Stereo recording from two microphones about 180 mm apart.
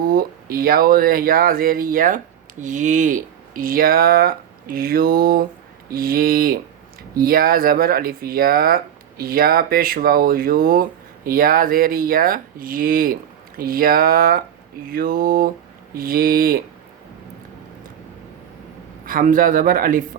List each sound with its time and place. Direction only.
0.0 s speech: 55° right (ahead or behind)
19.0 s speech: 50° right (ahead or behind)